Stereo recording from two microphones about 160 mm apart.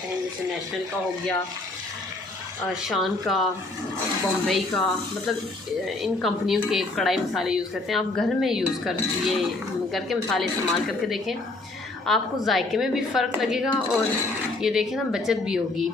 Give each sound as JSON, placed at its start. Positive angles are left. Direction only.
{"t": 2.9, "sound": "a woman's voice", "side_deg": 0}
{"t": 4.4, "sound": "a woman's voice", "side_deg": 5}